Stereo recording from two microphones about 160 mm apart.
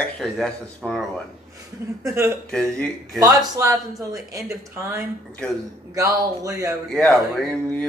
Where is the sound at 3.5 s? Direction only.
20° right (ahead or behind).